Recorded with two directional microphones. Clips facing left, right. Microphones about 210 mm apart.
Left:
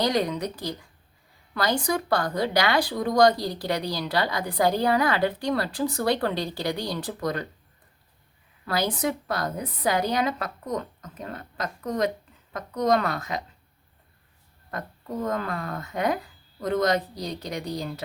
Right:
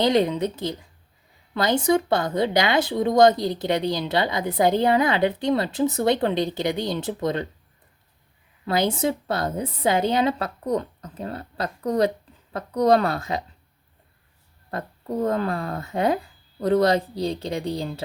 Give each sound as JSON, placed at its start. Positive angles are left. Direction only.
{"t": 0.0, "sound": "speech", "side_deg": -25}
{"t": 8.6, "sound": "speech", "side_deg": -25}
{"t": 14.7, "sound": "speech", "side_deg": -30}